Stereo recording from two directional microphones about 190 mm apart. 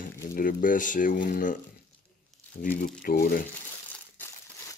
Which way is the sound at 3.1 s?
50° left (ahead or behind).